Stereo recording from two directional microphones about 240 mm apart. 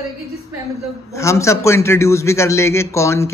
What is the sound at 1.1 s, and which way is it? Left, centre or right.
A man's voice, centre.